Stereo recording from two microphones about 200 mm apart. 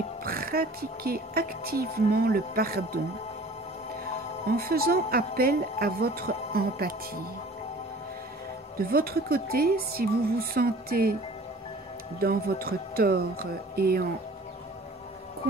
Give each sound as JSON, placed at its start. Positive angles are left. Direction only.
{"t": 0.2, "sound": "speech", "side_deg": -45}
{"t": 4.6, "sound": "speech", "side_deg": -50}
{"t": 8.7, "sound": "speech", "side_deg": -50}
{"t": 12.2, "sound": "speech", "side_deg": -50}